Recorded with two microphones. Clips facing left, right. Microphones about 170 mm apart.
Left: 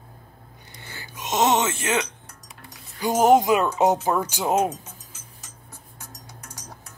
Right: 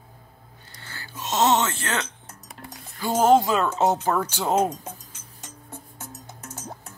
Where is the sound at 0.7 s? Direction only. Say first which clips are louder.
Right 1 dB; 15° left (ahead or behind).